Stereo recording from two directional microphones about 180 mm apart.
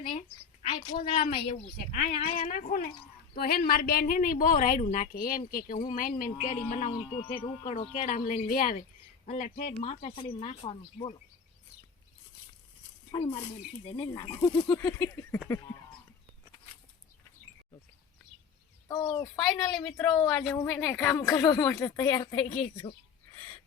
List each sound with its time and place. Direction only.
0.0 s a sound: 30° left (ahead or behind)
0.9 s a woman's voice: 50° left (ahead or behind)
9.7 s speech: 30° left (ahead or behind)
13.1 s a woman's voice: 30° left (ahead or behind)
18.9 s a woman's voice: 20° left (ahead or behind)